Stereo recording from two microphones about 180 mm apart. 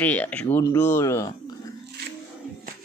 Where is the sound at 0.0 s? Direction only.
10° left (ahead or behind).